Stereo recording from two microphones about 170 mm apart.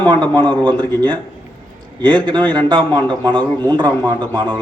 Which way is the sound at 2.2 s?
25° right (ahead or behind).